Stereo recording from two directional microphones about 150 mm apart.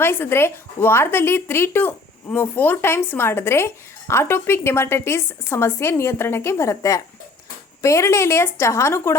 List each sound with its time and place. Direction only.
0.0 s a woman's voice: 15° left (ahead or behind)